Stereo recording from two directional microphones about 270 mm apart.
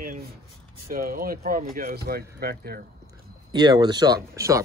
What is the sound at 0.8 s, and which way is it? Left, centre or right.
Speech, right.